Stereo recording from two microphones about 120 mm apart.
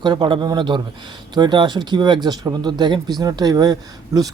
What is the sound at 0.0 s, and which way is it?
Speech, 40° right (ahead or behind).